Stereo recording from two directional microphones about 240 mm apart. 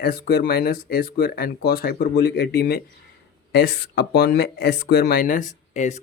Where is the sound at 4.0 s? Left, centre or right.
Left.